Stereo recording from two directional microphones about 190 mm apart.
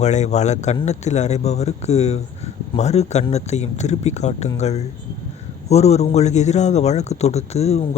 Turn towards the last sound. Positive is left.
turn(degrees=35)  # may be behind; listen again after turning